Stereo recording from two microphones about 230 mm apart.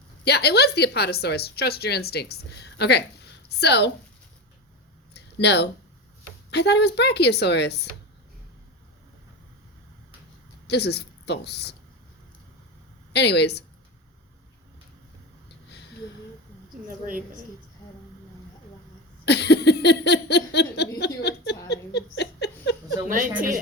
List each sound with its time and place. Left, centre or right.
0.3 s a woman's voice: left
5.1 s a sound: left
6.5 s a woman's voice: left
10.7 s a woman's voice: left
13.1 s a woman's voice: left
19.2 s a sound: left
23.0 s a woman's voice: right